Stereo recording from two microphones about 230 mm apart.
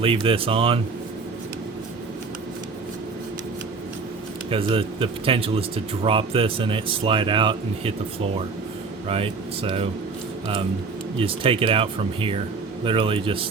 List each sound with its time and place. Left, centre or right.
0.0 s speech: right
4.5 s speech: right
9.0 s speech: right
11.2 s speech: right